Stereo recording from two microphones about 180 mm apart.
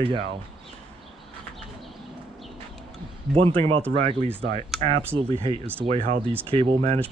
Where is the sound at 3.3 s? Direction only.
30° right (ahead or behind).